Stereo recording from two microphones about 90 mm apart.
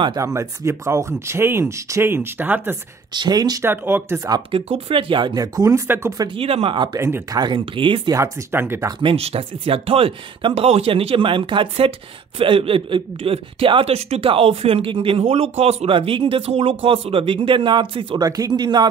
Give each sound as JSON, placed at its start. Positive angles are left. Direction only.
{"t": 0.2, "sound": "speech", "side_deg": -35}
{"t": 3.1, "sound": "speech", "side_deg": -50}
{"t": 3.6, "sound": "speech", "side_deg": -25}
{"t": 4.5, "sound": "speech", "side_deg": -90}
{"t": 5.3, "sound": "speech", "side_deg": -40}
{"t": 6.3, "sound": "speech", "side_deg": -90}
{"t": 7.0, "sound": "speech", "side_deg": -30}
{"t": 7.3, "sound": "speech", "side_deg": -60}
{"t": 8.1, "sound": "speech", "side_deg": -30}
{"t": 9.0, "sound": "speech", "side_deg": -90}
{"t": 12.4, "sound": "speech", "side_deg": -90}
{"t": 18.2, "sound": "speech", "side_deg": -45}